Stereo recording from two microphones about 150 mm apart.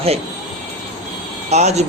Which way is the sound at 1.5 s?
50° right (ahead or behind).